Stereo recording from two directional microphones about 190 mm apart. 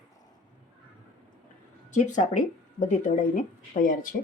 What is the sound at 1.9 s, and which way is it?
Speech, 40° left (ahead or behind).